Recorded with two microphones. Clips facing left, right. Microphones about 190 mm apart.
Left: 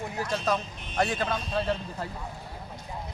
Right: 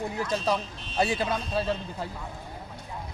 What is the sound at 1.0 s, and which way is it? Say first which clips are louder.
A man's voice: right 1 dB; 10° right (ahead or behind).